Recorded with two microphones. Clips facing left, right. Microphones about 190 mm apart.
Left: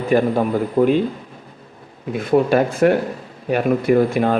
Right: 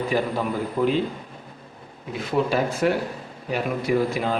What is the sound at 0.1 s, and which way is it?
Speech, 50° left (ahead or behind).